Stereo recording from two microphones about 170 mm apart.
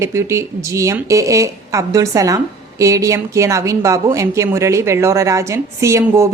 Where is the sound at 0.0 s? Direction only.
15° right (ahead or behind).